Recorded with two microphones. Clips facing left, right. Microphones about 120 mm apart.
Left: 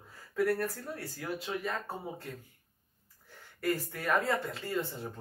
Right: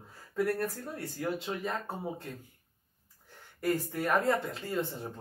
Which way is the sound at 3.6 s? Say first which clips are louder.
Right 2 dB; 15° right (ahead or behind).